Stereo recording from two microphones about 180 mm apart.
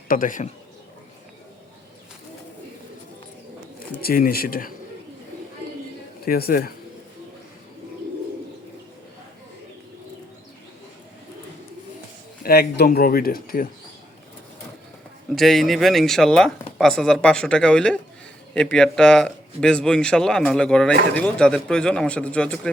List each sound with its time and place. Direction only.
0.1 s speech: 45° left (ahead or behind)
4.0 s speech: 55° left (ahead or behind)
6.2 s speech: 55° left (ahead or behind)
12.4 s speech: 60° left (ahead or behind)
15.4 s speech: centre (ahead or behind)